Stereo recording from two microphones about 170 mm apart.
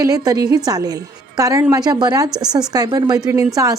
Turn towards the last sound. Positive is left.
turn(degrees=-20)  # may be behind; listen again after turning